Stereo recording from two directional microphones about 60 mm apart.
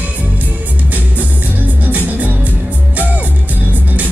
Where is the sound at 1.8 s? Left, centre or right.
Right.